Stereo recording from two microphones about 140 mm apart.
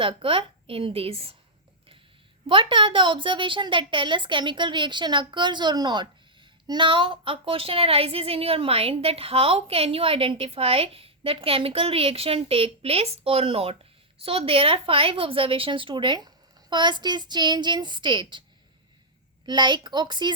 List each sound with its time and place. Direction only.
0.0 s a woman's voice: 40° right (ahead or behind)
2.5 s a woman's voice: 35° right (ahead or behind)
19.5 s a woman's voice: 30° right (ahead or behind)